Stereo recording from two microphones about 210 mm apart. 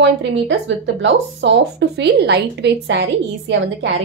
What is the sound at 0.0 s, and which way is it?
Speech, 55° right (ahead or behind).